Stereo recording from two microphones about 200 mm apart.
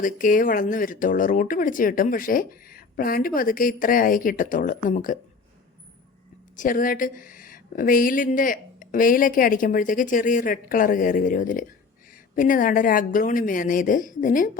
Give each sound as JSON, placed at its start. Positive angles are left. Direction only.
{"t": 0.0, "sound": "speech", "side_deg": 40}
{"t": 6.6, "sound": "speech", "side_deg": 45}